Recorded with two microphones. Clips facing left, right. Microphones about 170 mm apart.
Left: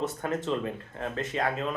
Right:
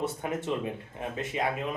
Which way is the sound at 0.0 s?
10° right (ahead or behind).